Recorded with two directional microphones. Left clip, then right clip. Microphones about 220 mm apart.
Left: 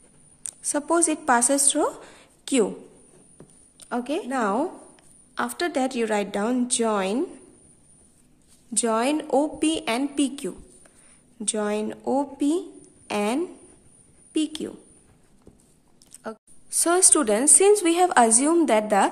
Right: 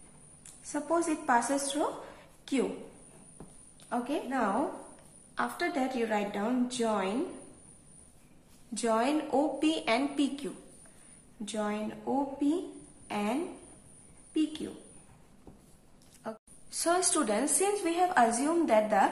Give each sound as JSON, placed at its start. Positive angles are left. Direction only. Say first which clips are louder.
{"t": 0.5, "sound": "a woman's voice", "louder": "left 7 dB", "side_deg": 50}
{"t": 3.9, "sound": "a woman's voice", "louder": "left 6 dB", "side_deg": 50}
{"t": 8.7, "sound": "a woman's voice", "louder": "left 5 dB", "side_deg": 50}
{"t": 16.2, "sound": "a woman's voice", "louder": "left 5 dB", "side_deg": 45}